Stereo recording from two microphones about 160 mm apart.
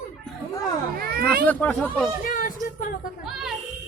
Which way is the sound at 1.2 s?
10° left (ahead or behind).